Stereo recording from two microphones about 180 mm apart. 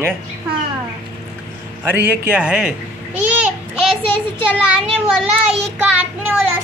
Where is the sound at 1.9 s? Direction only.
10° right (ahead or behind).